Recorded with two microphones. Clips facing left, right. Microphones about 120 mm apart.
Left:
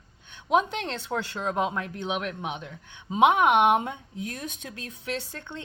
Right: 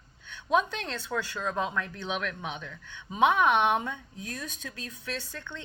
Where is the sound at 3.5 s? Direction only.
55° left (ahead or behind).